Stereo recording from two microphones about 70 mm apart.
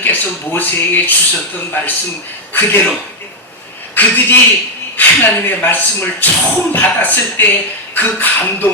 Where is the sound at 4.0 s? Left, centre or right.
Left.